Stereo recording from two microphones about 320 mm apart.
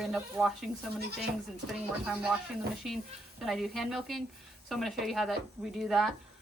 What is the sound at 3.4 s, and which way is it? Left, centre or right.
Speech, centre.